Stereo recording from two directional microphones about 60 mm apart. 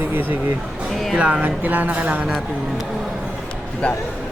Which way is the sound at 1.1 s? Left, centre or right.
Centre.